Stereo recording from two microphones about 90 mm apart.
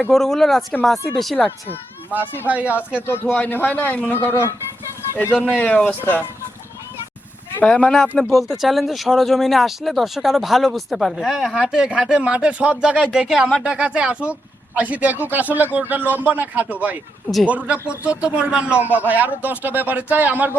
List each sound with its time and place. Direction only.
0.1 s speech: 5° left (ahead or behind)
1.4 s a man's voice: 25° left (ahead or behind)
2.5 s speech: 15° right (ahead or behind)
3.1 s a man's voice: 25° left (ahead or behind)
7.6 s speech: 10° left (ahead or behind)
8.2 s a man's voice: centre (ahead or behind); by 20.5 s 20° right (ahead or behind)